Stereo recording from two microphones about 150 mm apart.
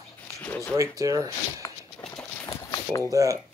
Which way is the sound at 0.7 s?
20° right (ahead or behind).